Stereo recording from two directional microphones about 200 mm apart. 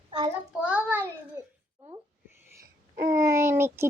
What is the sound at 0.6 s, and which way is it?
Speech, 5° right (ahead or behind).